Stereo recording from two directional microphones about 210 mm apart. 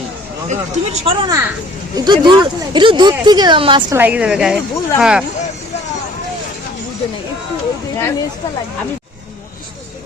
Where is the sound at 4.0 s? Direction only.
5° right (ahead or behind).